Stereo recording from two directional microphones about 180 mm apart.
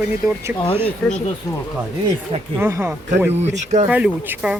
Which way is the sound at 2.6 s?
10° right (ahead or behind).